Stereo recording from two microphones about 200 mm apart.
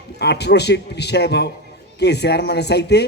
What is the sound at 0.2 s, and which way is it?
A man's voice, 55° left (ahead or behind).